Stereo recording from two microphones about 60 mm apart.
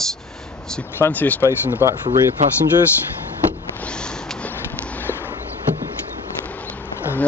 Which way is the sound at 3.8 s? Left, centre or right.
Centre.